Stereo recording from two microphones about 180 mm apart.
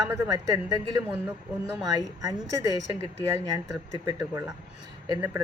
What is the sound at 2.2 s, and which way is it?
Speech, 20° right (ahead or behind).